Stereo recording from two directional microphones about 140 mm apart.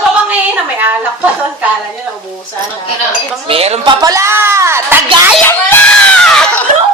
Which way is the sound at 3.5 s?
45° right (ahead or behind).